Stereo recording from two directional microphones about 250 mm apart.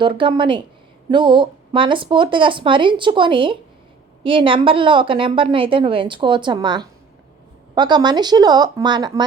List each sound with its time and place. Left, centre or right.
0.0 s a woman's voice: centre